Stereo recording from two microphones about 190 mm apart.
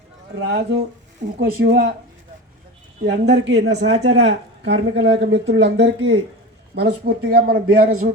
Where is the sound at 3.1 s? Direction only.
65° right (ahead or behind).